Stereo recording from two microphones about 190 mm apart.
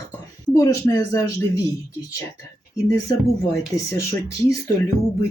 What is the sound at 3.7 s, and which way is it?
Speech, 15° left (ahead or behind).